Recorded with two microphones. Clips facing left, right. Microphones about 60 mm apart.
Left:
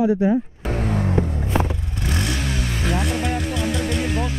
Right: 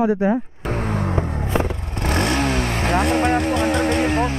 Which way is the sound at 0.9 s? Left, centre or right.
Right.